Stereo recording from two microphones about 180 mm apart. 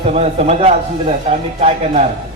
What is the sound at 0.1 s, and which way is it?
A man's voice, 35° right (ahead or behind).